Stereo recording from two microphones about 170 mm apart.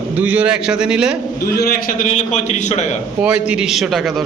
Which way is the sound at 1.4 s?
65° left (ahead or behind).